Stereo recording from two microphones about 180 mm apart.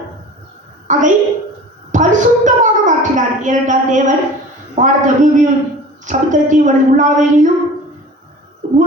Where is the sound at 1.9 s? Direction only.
45° right (ahead or behind).